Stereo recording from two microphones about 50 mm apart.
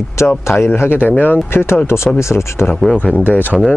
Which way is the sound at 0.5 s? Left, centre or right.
Left.